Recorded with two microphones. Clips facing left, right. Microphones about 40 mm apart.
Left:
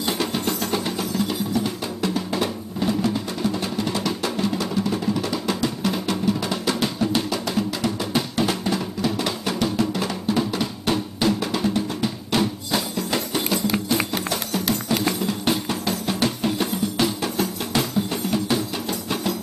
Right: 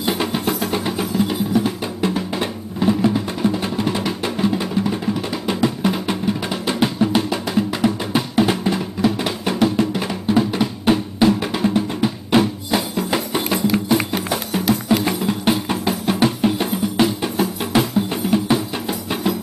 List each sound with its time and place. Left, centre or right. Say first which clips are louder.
0.0 s music: right 3 dB; centre